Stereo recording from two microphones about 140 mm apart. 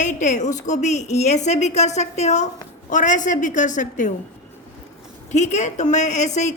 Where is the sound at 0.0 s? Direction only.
60° left (ahead or behind).